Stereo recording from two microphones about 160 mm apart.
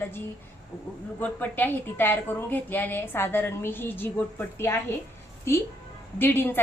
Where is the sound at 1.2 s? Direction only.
10° left (ahead or behind).